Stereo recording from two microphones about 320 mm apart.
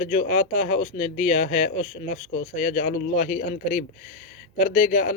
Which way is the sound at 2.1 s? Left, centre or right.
Left.